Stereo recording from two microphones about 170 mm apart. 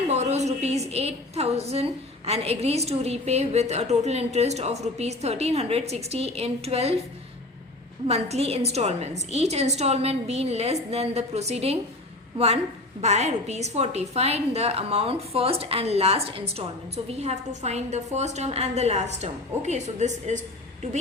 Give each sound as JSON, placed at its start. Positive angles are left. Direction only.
{"t": 0.1, "sound": "a woman's voice", "side_deg": -40}
{"t": 8.0, "sound": "a woman's voice", "side_deg": -35}
{"t": 13.0, "sound": "a woman's voice", "side_deg": -40}